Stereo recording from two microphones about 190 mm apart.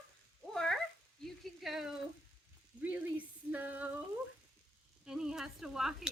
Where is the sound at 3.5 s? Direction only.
10° right (ahead or behind).